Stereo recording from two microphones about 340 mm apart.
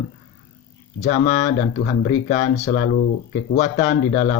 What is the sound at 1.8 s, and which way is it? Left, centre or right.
Speech, centre.